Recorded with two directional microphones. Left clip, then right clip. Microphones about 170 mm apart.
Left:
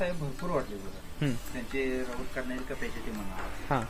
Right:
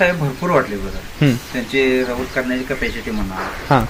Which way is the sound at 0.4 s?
5° right (ahead or behind).